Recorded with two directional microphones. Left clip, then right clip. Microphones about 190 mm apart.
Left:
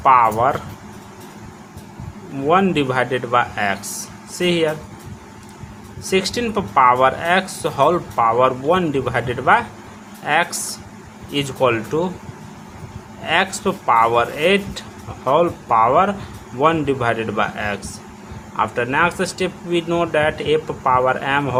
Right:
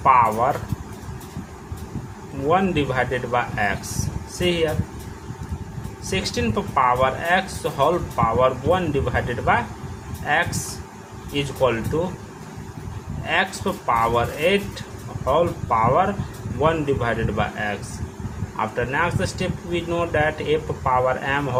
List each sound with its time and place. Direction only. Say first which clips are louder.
0.0 s speech: left 3 dB; 30° left (ahead or behind)
2.5 s speech: left 4 dB; 30° left (ahead or behind)
6.1 s speech: left 5 dB; 35° left (ahead or behind)
13.2 s speech: left 4 dB; 30° left (ahead or behind)